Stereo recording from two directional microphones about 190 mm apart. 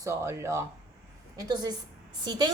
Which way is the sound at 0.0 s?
15° right (ahead or behind).